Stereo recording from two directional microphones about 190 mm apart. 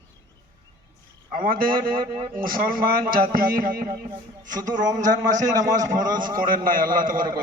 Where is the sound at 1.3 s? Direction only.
45° right (ahead or behind).